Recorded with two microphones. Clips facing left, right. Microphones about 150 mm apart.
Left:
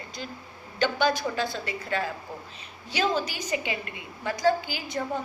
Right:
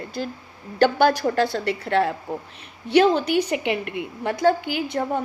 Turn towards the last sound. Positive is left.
turn(degrees=-60)  # may be behind; listen again after turning